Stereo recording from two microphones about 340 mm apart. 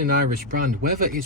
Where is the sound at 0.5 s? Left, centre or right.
Right.